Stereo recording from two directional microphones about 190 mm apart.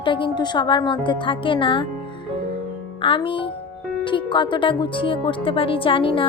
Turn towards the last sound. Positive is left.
turn(degrees=25)  # may be behind; listen again after turning